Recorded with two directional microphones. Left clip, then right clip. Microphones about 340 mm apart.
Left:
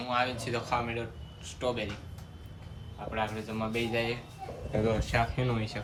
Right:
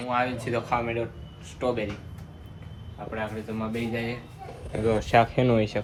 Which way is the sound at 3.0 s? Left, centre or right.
Centre.